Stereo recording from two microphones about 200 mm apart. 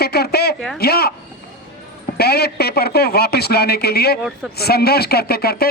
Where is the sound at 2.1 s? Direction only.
50° left (ahead or behind).